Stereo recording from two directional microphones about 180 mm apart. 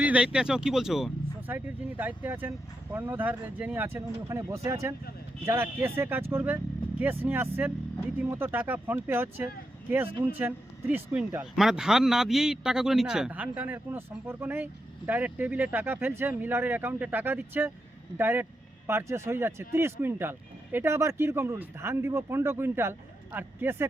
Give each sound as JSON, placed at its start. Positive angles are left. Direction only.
{"t": 0.0, "sound": "speech", "side_deg": -5}